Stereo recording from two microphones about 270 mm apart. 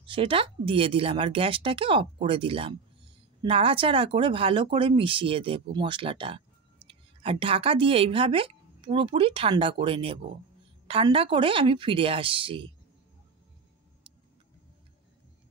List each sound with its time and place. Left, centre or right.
0.0 s a woman's voice: centre